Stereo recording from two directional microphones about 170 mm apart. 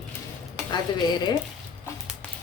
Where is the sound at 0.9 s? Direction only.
25° left (ahead or behind).